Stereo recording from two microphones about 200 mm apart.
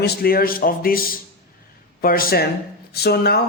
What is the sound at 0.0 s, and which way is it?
Speech, 50° left (ahead or behind).